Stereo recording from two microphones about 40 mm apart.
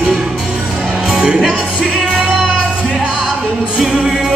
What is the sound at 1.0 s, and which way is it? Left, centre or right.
Music, centre.